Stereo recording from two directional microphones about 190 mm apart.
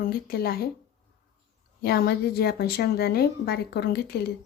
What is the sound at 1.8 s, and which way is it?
A woman's voice, 55° left (ahead or behind).